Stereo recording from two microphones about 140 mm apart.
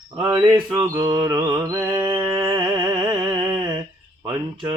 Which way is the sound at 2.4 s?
30° right (ahead or behind).